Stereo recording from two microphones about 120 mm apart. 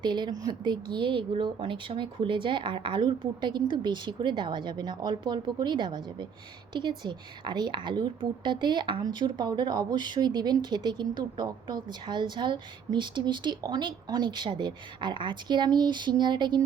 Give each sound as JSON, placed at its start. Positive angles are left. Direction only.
{"t": 0.0, "sound": "a woman's voice", "side_deg": -40}